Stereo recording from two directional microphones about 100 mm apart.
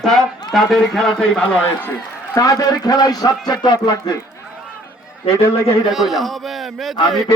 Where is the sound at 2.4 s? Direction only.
35° left (ahead or behind).